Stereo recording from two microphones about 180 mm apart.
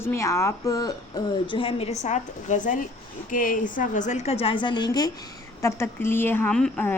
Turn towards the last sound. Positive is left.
turn(degrees=5)  # may be behind; listen again after turning